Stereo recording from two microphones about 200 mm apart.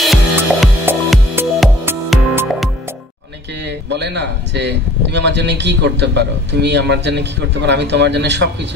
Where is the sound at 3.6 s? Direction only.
60° right (ahead or behind).